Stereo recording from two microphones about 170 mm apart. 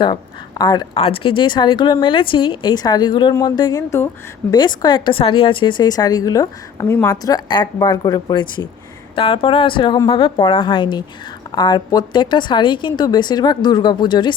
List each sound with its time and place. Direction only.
0.6 s a woman's voice: 25° left (ahead or behind)